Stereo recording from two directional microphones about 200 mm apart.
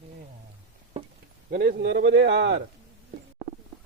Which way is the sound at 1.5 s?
50° right (ahead or behind).